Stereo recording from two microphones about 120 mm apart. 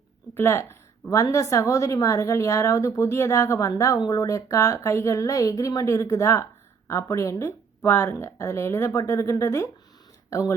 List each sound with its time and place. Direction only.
0.3 s a woman's voice: 20° left (ahead or behind)